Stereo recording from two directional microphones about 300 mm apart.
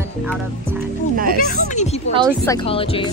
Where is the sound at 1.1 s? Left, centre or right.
Right.